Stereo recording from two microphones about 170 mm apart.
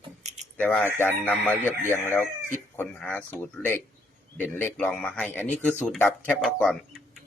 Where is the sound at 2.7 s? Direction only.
5° left (ahead or behind).